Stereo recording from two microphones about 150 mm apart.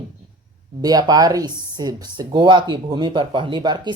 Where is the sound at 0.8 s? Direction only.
25° right (ahead or behind).